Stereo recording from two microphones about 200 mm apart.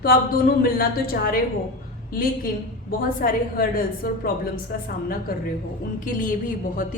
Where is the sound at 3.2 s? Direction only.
45° left (ahead or behind).